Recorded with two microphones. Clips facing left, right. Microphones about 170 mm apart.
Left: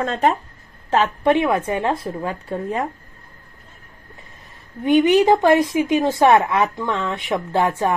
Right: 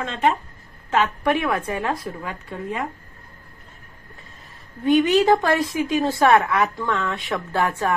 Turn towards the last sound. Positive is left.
turn(degrees=20)  # may be behind; listen again after turning